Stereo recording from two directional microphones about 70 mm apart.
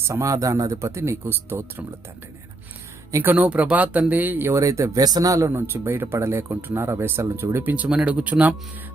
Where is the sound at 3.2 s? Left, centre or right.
Right.